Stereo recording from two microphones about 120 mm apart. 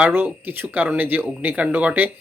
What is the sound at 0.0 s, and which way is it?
Speech, 20° right (ahead or behind).